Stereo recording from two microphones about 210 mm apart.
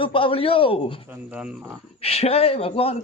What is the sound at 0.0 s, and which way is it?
Speech, 25° left (ahead or behind).